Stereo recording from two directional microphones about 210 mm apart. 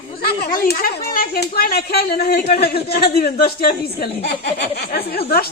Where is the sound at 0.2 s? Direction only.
45° left (ahead or behind).